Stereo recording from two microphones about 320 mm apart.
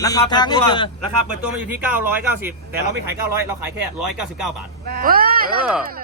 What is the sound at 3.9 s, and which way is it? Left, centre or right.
Speech, centre.